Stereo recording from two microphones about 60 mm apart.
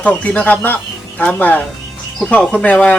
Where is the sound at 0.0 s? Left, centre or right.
Left.